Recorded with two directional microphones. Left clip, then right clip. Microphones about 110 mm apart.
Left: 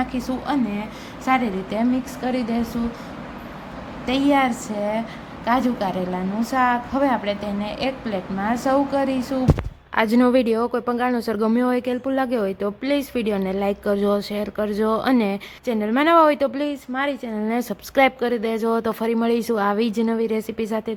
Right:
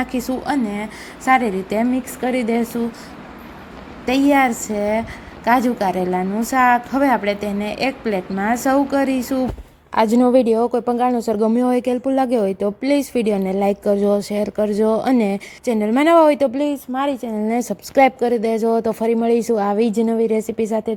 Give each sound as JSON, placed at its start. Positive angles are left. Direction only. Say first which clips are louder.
{"t": 0.0, "sound": "a woman's voice", "louder": "right 3 dB", "side_deg": -55}
{"t": 4.0, "sound": "a woman's voice", "louder": "right 4 dB", "side_deg": -65}
{"t": 9.9, "sound": "speech", "louder": "right 4 dB", "side_deg": -50}
{"t": 10.3, "sound": "a woman's voice", "louder": "right 4 dB", "side_deg": -20}
{"t": 11.6, "sound": "a woman's voice", "louder": "right 4 dB", "side_deg": -45}
{"t": 13.9, "sound": "a woman's voice", "louder": "right 4 dB", "side_deg": -25}
{"t": 15.6, "sound": "a woman's voice", "louder": "right 3 dB", "side_deg": -55}